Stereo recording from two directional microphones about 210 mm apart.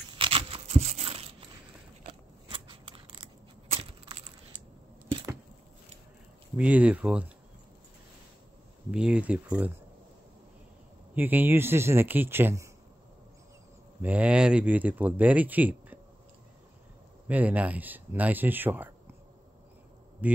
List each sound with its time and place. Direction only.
0.2 s a sound: 25° right (ahead or behind)
2.5 s scissors: 25° right (ahead or behind)
5.1 s a sound: 15° right (ahead or behind)
6.5 s speech: 5° right (ahead or behind)
8.9 s speech: 5° right (ahead or behind)
11.1 s speech: 10° right (ahead or behind)
14.0 s speech: 5° right (ahead or behind)
17.3 s speech: 5° right (ahead or behind)
20.2 s speech: 5° right (ahead or behind)